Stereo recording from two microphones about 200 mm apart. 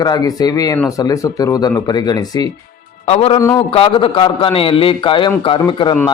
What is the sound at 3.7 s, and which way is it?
A man's voice, 30° left (ahead or behind).